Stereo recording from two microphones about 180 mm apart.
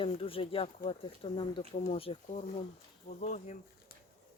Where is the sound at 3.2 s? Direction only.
40° left (ahead or behind).